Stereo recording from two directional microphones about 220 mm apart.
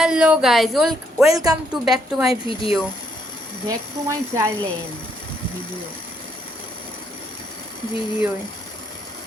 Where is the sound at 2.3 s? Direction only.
25° left (ahead or behind).